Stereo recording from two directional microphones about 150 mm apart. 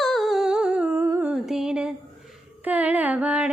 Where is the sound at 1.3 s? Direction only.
5° right (ahead or behind).